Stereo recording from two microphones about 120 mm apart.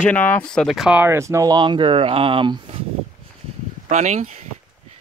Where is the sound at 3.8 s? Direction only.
80° right.